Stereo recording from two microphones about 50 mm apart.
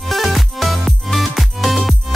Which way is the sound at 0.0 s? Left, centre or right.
Centre.